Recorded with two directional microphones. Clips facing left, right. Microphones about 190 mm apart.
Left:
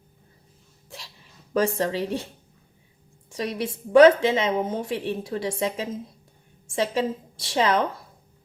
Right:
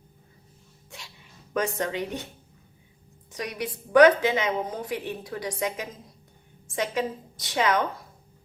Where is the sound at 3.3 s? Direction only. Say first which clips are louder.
Left 4 dB; 30° left (ahead or behind).